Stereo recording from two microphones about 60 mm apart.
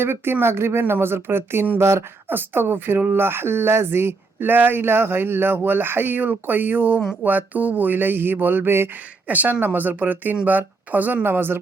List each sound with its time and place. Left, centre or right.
0.0 s speech: right
1.8 s speech: right
2.3 s speech: right
9.2 s speech: right